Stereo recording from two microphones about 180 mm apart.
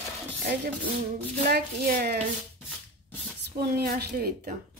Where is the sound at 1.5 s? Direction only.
55° right (ahead or behind).